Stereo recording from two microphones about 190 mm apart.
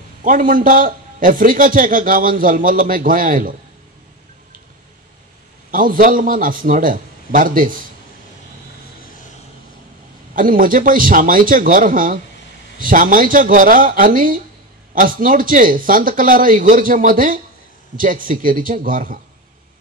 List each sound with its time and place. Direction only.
0.2 s a man's voice: 45° right (ahead or behind)
5.7 s a man's voice: 45° right (ahead or behind)
10.3 s a man's voice: 45° right (ahead or behind)